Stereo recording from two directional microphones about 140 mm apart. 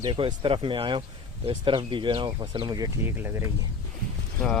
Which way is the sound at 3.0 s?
15° right (ahead or behind).